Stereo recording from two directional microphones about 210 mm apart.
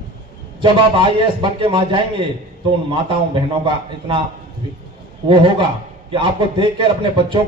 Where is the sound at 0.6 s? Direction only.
25° right (ahead or behind).